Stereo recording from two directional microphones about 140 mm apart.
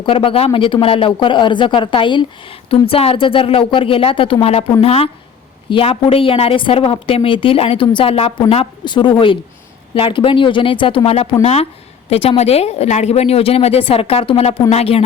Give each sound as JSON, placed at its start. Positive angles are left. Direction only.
{"t": 0.0, "sound": "a woman's voice", "side_deg": 40}